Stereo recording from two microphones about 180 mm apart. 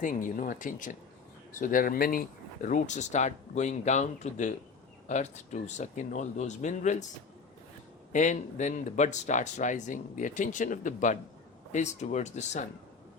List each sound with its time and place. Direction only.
0.0 s speech: 45° left (ahead or behind)
8.1 s speech: 45° left (ahead or behind)